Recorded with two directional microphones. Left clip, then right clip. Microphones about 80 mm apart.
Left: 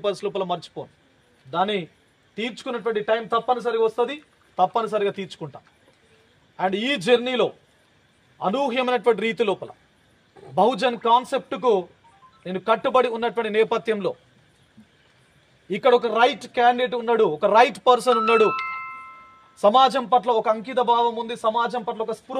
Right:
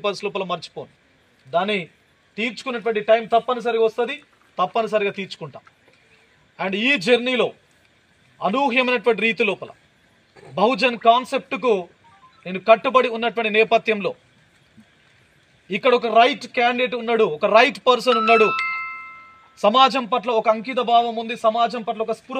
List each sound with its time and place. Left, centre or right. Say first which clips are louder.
0.2 s a man's voice: right 1 dB; left
2.3 s a man's voice: right 3 dB; left
2.8 s speech: right 5 dB; left
15.7 s speech: right 2 dB; left
19.6 s a man's voice: right 1 dB; left
21.7 s speech: right 2 dB; left